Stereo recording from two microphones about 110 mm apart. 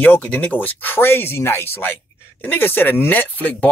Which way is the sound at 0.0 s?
15° left (ahead or behind).